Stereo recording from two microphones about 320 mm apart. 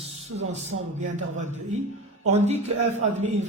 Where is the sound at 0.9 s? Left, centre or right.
Right.